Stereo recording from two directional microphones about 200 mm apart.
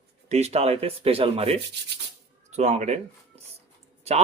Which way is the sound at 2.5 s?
35° right (ahead or behind).